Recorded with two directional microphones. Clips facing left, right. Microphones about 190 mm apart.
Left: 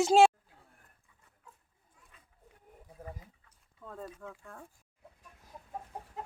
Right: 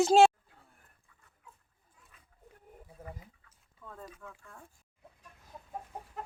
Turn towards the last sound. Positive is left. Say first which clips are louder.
# left 4 dB
turn(degrees=30)  # may be behind; listen again after turning